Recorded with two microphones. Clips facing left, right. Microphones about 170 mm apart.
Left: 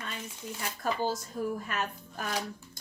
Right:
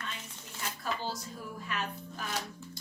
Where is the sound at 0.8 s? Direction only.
50° left (ahead or behind).